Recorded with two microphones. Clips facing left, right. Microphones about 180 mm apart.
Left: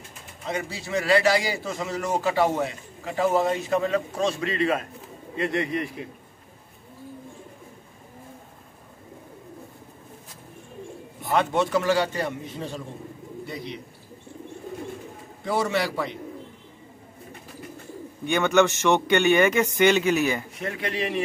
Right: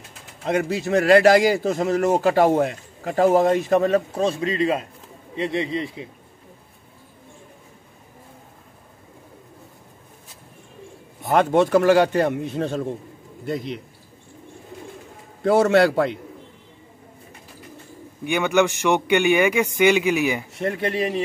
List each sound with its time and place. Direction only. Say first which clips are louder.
0.5 s speech: right 8 dB; 60° right (ahead or behind)
4.4 s speech: right 3 dB; 25° right (ahead or behind)
11.3 s a man's voice: right 6 dB; 50° right (ahead or behind); by 12.8 s 70° right (ahead or behind)
15.4 s a man's voice: right 9 dB; 65° right (ahead or behind)
18.2 s a man's voice: right 1 dB; 15° right (ahead or behind)
20.6 s speech: right 7 dB; 40° right (ahead or behind)